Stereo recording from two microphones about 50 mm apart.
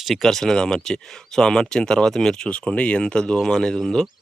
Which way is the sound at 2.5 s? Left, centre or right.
Left.